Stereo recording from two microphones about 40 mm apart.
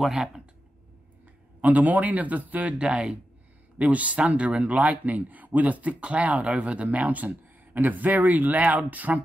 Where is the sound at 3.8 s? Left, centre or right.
Right.